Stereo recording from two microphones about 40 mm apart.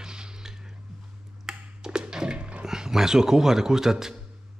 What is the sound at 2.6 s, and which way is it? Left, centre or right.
Speech, centre.